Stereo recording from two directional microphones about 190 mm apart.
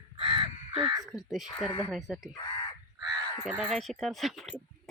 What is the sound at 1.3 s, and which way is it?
Speech, centre (ahead or behind).